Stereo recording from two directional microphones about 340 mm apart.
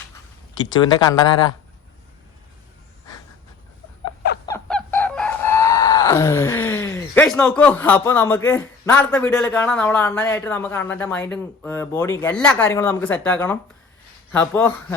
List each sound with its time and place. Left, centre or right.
0.7 s speech: centre
4.4 s chicken: centre
14.3 s speech: centre